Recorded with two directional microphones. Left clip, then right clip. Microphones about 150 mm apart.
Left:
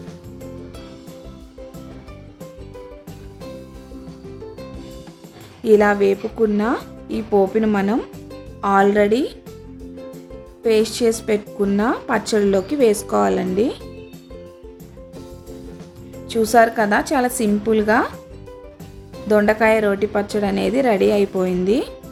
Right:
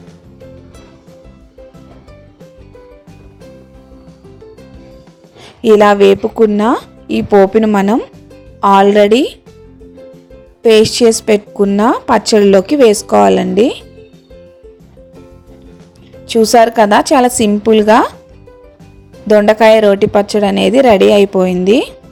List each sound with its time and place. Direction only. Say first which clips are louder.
5.6 s a woman's voice: right 8 dB; 55° right (ahead or behind)
10.6 s a woman's voice: right 10 dB; 50° right (ahead or behind)
16.2 s a woman's voice: right 7 dB; 50° right (ahead or behind)
19.3 s a woman's voice: right 9 dB; 45° right (ahead or behind)